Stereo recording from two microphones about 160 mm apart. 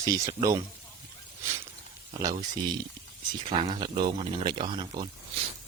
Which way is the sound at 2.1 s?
20° right (ahead or behind).